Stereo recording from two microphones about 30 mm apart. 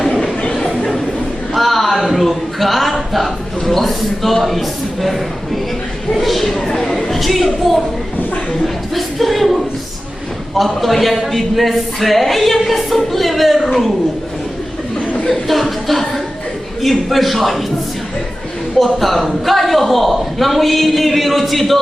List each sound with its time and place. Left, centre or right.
0.4 s a sound: centre
1.5 s a sound: centre
2.1 s a man's voice: centre
6.1 s speech: centre
6.7 s a sound: centre
8.6 s a woman's voice: centre
10.6 s speech: centre
15.3 s speech: centre
18.8 s speech: centre